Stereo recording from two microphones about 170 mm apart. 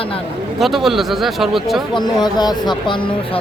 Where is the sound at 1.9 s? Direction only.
25° left (ahead or behind).